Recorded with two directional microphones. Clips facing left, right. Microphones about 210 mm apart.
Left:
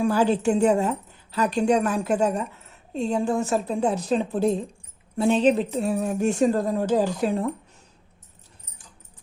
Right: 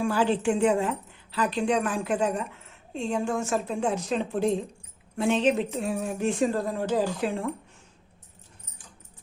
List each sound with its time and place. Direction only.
0.0 s speech: 40° left (ahead or behind)